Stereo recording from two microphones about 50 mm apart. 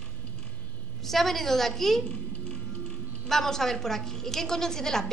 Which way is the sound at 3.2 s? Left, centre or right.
Centre.